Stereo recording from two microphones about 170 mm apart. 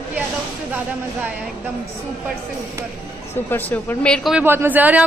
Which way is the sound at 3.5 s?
10° left (ahead or behind).